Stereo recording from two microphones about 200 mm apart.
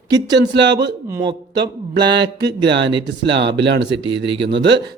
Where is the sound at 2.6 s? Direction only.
60° right (ahead or behind).